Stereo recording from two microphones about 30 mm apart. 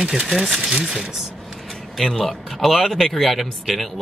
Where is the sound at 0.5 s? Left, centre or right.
Right.